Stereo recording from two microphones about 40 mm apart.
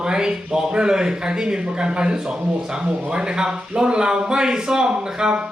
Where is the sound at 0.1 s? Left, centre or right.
Centre.